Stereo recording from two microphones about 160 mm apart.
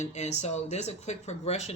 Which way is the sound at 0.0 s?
45° left (ahead or behind).